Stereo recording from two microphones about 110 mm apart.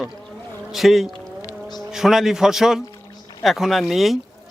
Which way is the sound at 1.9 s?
Centre (ahead or behind).